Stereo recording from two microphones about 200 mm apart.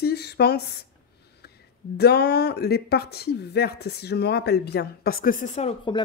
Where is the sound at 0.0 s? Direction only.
55° left (ahead or behind).